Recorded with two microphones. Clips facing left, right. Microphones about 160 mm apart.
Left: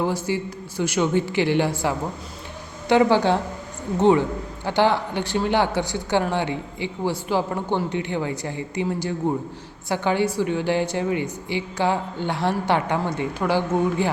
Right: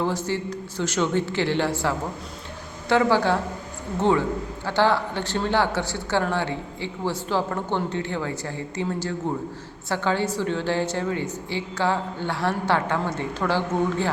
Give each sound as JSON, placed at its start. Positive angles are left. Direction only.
{"t": 0.0, "sound": "a woman's voice", "side_deg": 10}